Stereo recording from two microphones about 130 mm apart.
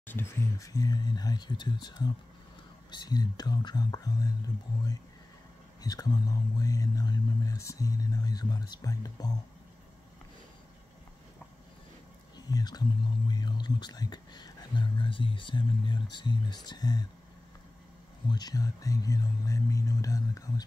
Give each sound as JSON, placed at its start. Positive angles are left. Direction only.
{"t": 0.0, "sound": "speech", "side_deg": 15}
{"t": 0.6, "sound": "speech", "side_deg": 30}
{"t": 5.8, "sound": "speech", "side_deg": 30}
{"t": 12.4, "sound": "speech", "side_deg": 30}
{"t": 18.3, "sound": "speech", "side_deg": 30}